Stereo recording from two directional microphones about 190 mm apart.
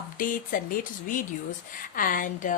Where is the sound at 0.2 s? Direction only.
45° left (ahead or behind).